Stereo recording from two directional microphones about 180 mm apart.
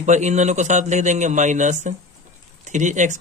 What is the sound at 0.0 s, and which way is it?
Speech, 40° right (ahead or behind).